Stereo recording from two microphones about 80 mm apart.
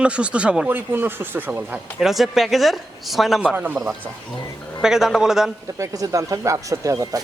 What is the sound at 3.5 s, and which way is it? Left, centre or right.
Speech, right.